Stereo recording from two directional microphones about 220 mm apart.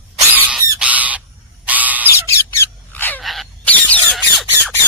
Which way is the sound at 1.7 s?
5° right (ahead or behind).